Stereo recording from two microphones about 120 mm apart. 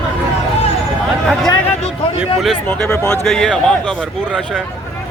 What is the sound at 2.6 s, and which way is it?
Speech, 15° left (ahead or behind).